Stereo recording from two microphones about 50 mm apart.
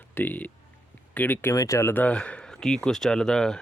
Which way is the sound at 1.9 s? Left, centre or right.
Left.